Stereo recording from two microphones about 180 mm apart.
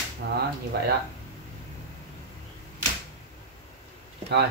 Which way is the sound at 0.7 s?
65° right (ahead or behind).